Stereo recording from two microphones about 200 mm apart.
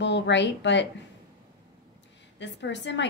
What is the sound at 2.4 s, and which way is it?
Speech, 60° left (ahead or behind).